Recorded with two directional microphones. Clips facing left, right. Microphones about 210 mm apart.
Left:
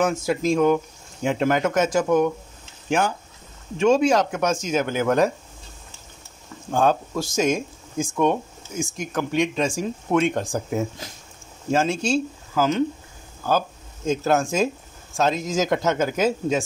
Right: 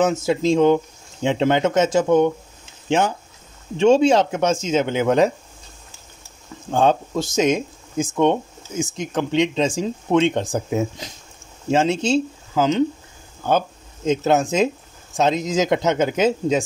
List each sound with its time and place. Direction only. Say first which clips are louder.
0.0 s speech: right 3 dB; 25° right (ahead or behind)
6.7 s speech: right 2 dB; 20° right (ahead or behind)